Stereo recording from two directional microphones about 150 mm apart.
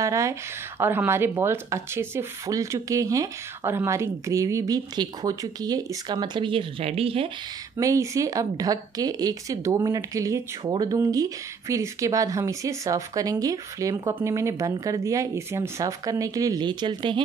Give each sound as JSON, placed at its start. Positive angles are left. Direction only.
{"t": 0.0, "sound": "speech", "side_deg": -20}
{"t": 7.7, "sound": "speech", "side_deg": -20}